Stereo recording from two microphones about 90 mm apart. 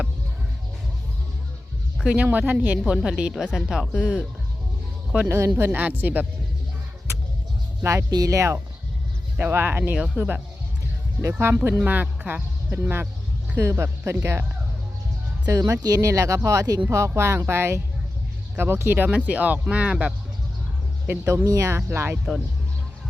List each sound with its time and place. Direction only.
2.0 s speech: 15° right (ahead or behind)
5.5 s speech: 25° right (ahead or behind)
7.8 s speech: 30° right (ahead or behind)
9.4 s speech: 25° right (ahead or behind)
11.2 s speech: 30° right (ahead or behind)
15.4 s speech: 40° right (ahead or behind); by 20.1 s 10° right (ahead or behind)
21.2 s speech: 40° right (ahead or behind)